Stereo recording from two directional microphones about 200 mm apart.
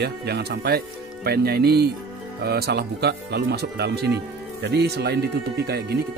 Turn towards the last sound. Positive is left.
turn(degrees=-55)  # may be behind; listen again after turning